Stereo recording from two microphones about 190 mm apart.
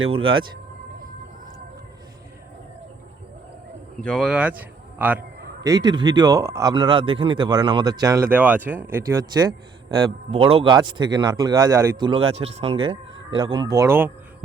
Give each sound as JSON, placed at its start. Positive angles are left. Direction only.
{"t": 0.1, "sound": "speech", "side_deg": -25}
{"t": 4.0, "sound": "speech", "side_deg": 0}
{"t": 5.6, "sound": "speech", "side_deg": -20}
{"t": 10.3, "sound": "speech", "side_deg": -30}